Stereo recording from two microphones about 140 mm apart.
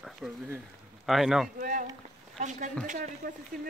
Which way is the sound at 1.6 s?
70° right (ahead or behind).